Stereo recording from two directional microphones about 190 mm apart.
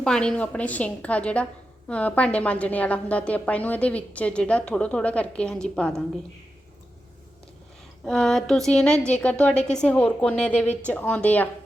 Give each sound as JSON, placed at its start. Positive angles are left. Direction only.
{"t": 0.0, "sound": "a woman's voice", "side_deg": 5}
{"t": 8.0, "sound": "a woman's voice", "side_deg": 5}